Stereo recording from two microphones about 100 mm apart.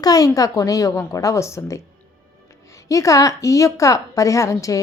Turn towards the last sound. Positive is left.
turn(degrees=30)  # may be behind; listen again after turning